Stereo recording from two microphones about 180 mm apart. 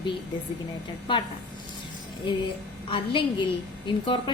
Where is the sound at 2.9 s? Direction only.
30° left (ahead or behind).